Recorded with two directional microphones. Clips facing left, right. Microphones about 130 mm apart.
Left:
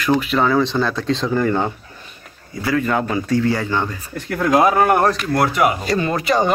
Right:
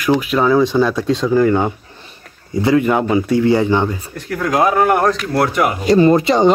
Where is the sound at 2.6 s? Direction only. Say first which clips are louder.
Right 5 dB; 20° right (ahead or behind).